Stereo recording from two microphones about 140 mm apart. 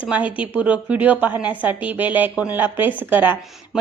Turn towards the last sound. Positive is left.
turn(degrees=-10)  # may be behind; listen again after turning